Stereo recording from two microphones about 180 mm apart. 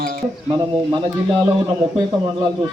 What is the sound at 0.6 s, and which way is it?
Speech, 20° right (ahead or behind).